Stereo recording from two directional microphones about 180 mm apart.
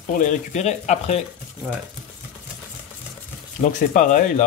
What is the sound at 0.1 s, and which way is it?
Speech, 45° left (ahead or behind).